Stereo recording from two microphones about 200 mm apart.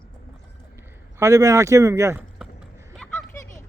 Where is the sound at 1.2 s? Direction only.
15° right (ahead or behind).